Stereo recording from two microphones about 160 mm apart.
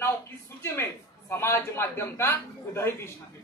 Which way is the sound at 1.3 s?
15° left (ahead or behind).